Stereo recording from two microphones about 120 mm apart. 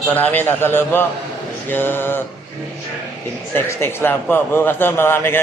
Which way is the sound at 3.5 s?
20° left (ahead or behind).